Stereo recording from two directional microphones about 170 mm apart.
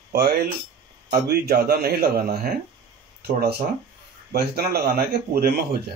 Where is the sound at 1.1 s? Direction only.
65° right (ahead or behind).